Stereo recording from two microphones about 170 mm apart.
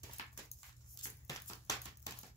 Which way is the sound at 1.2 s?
20° left (ahead or behind).